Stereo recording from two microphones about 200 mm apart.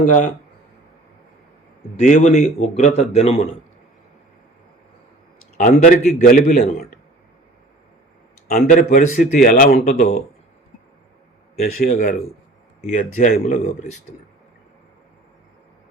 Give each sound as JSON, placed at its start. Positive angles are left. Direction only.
{"t": 0.0, "sound": "a man's voice", "side_deg": 40}
{"t": 2.0, "sound": "a man's voice", "side_deg": 35}
{"t": 5.5, "sound": "a man's voice", "side_deg": 40}
{"t": 8.4, "sound": "a man's voice", "side_deg": 40}
{"t": 11.8, "sound": "a man's voice", "side_deg": 45}